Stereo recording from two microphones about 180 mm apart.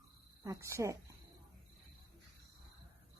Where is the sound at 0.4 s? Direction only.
15° right (ahead or behind).